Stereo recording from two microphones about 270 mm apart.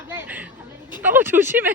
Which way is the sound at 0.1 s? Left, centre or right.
Centre.